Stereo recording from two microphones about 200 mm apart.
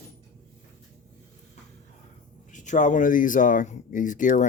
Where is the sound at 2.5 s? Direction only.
40° left (ahead or behind).